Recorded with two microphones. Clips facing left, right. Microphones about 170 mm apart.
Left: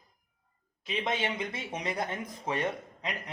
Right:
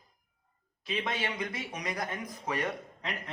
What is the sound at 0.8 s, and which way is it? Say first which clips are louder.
Speech: left 2 dB; 20° left (ahead or behind).